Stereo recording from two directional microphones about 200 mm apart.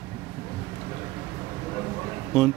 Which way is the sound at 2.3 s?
5° right (ahead or behind).